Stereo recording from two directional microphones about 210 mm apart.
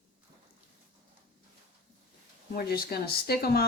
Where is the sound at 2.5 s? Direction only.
45° left (ahead or behind).